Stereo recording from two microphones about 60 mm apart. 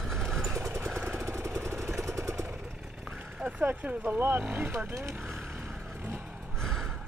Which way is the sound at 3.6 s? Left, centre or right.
Right.